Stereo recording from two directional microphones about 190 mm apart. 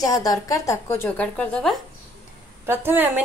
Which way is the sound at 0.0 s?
20° left (ahead or behind).